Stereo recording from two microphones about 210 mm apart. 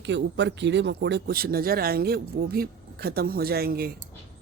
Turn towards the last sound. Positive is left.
turn(degrees=-45)  # may be behind; listen again after turning